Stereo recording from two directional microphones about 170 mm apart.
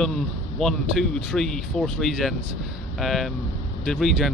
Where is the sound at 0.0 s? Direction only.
Centre (ahead or behind).